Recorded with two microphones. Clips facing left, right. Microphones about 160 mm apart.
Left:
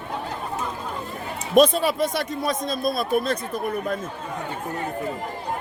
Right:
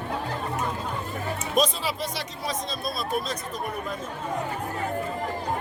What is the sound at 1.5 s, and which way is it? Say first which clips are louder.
Speech: left 9 dB; 55° left (ahead or behind).